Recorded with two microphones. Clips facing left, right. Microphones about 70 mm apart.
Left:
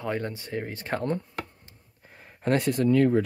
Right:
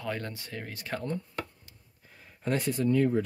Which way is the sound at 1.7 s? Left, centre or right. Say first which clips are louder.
Left 4 dB; left.